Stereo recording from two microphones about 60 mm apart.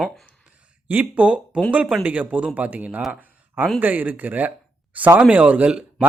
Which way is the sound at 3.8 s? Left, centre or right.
Right.